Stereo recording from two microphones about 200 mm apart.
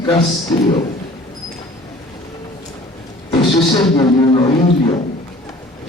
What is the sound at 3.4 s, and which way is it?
Beatboxing, 20° left (ahead or behind).